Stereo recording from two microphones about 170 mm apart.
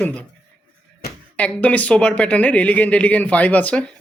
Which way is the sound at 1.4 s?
10° left (ahead or behind).